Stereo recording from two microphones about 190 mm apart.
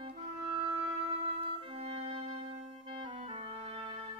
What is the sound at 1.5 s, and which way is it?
Clarinet, 30° right (ahead or behind).